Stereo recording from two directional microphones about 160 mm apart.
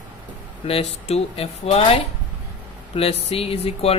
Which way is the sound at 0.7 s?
40° left (ahead or behind).